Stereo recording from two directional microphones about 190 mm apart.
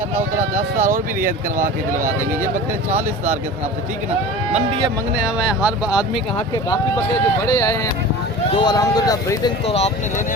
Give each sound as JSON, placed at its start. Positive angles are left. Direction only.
{"t": 0.8, "sound": "speech", "side_deg": -45}
{"t": 5.2, "sound": "speech", "side_deg": -5}
{"t": 7.4, "sound": "speech", "side_deg": 15}
{"t": 9.6, "sound": "speech", "side_deg": 35}